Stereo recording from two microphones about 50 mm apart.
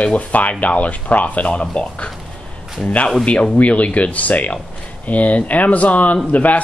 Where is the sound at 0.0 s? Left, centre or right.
Left.